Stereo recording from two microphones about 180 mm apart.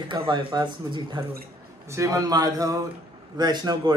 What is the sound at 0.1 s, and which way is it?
Speech, 30° right (ahead or behind).